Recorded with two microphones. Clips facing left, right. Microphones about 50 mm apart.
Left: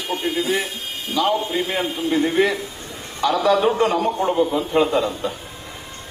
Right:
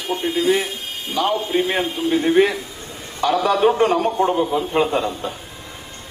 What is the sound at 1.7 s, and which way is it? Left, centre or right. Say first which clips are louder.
A man's voice: right 2 dB; right.